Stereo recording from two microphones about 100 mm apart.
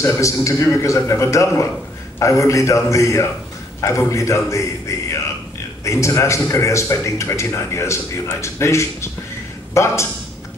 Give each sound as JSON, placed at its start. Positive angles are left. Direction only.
{"t": 0.0, "sound": "a man's voice", "side_deg": 30}